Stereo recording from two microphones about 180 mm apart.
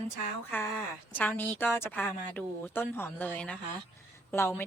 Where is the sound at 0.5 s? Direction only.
10° left (ahead or behind).